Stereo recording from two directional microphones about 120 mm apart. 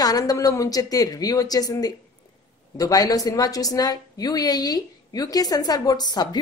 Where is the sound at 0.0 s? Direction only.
30° left (ahead or behind).